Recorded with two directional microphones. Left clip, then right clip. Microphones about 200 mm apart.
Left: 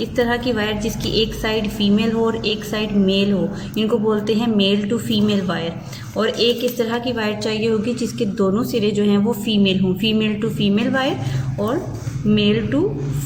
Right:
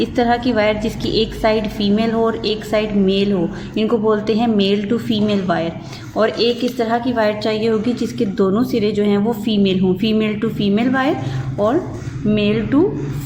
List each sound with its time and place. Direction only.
0.0 s a woman's voice: 20° right (ahead or behind)
12.2 s a woman's voice: 20° right (ahead or behind)